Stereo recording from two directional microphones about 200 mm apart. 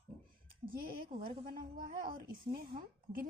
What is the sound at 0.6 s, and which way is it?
A woman's voice, 45° right (ahead or behind).